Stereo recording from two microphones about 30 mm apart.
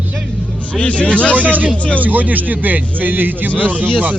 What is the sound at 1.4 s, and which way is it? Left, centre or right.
Speech, right.